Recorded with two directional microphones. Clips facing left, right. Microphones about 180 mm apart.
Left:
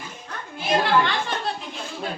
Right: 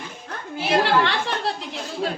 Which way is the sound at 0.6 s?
75° right (ahead or behind).